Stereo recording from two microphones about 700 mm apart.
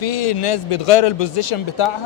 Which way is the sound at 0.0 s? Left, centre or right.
Left.